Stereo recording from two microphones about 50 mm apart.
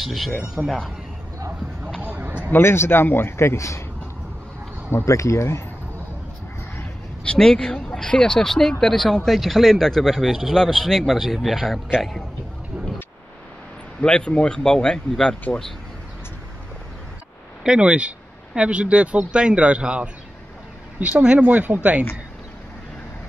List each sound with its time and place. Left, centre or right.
0.0 s speech: centre
0.3 s speech: centre
0.7 s speech: centre
2.0 s a sound: right
2.5 s a man's voice: left
5.0 s speech: left
7.2 s a man's voice: centre
10.5 s speech: centre
14.0 s a man's voice: centre
17.6 s speech: right
21.2 s speech: right
21.5 s speech: right